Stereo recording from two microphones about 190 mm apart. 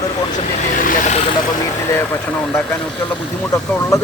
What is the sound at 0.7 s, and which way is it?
Speech, 45° left (ahead or behind).